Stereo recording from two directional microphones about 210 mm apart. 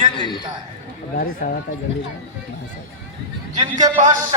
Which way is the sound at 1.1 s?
45° left (ahead or behind).